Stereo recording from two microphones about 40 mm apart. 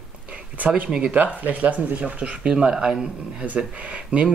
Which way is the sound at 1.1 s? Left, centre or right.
Right.